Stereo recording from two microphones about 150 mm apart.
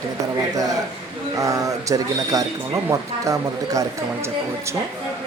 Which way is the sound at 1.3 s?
20° right (ahead or behind).